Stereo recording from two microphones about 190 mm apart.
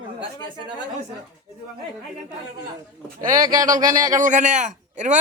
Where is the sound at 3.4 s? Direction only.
20° right (ahead or behind).